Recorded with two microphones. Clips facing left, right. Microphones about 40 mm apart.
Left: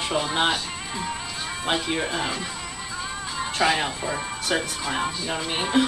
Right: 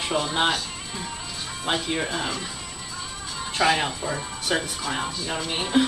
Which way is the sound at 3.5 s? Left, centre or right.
Centre.